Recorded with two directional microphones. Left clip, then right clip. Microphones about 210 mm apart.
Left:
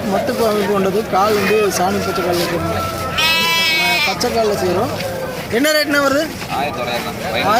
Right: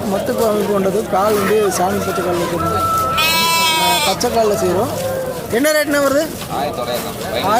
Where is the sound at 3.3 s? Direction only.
60° right (ahead or behind).